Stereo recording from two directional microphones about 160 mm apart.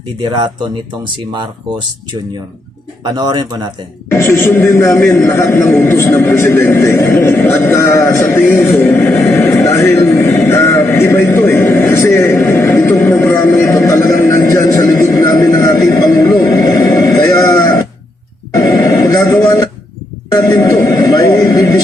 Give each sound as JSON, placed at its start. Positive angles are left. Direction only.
{"t": 0.2, "sound": "speech", "side_deg": -25}
{"t": 3.0, "sound": "speech", "side_deg": -25}
{"t": 4.1, "sound": "a man's voice", "side_deg": 15}
{"t": 18.5, "sound": "a sound", "side_deg": 25}
{"t": 20.3, "sound": "speech", "side_deg": 25}